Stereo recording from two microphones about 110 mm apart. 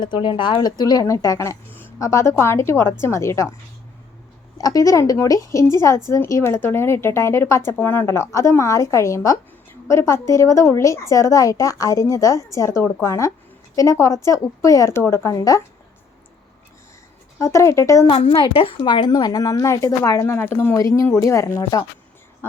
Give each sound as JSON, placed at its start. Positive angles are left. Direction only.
{"t": 0.0, "sound": "a woman's voice", "side_deg": 45}
{"t": 4.5, "sound": "a woman's voice", "side_deg": 35}
{"t": 17.3, "sound": "a woman's voice", "side_deg": 30}
{"t": 18.1, "sound": "a woman's voice", "side_deg": 60}